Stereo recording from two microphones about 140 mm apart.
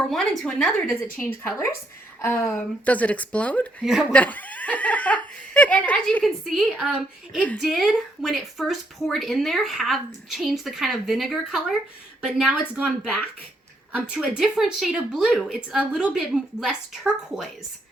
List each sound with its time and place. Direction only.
0.1 s speech: 5° left (ahead or behind)
1.2 s speech: 20° left (ahead or behind); by 17.5 s centre (ahead or behind)